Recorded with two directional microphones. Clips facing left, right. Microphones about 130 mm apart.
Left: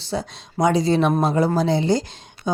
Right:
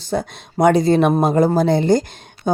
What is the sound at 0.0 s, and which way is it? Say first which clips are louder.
Speech: right 4 dB; 50° right (ahead or behind).